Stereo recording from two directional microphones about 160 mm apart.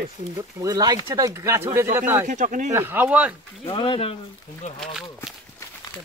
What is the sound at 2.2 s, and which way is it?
Speech, 55° right (ahead or behind).